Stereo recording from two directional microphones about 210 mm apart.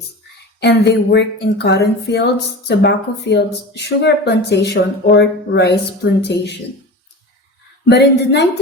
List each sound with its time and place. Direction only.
0.6 s speech: 55° left (ahead or behind)
7.9 s speech: 55° left (ahead or behind)